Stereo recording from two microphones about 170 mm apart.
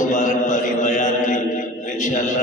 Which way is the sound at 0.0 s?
45° left (ahead or behind).